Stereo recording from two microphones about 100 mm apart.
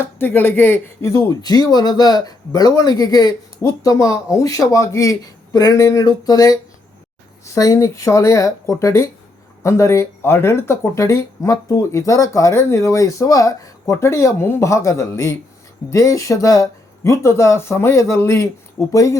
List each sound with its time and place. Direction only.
0.0 s speech: 20° left (ahead or behind)
1.0 s speech: 35° left (ahead or behind)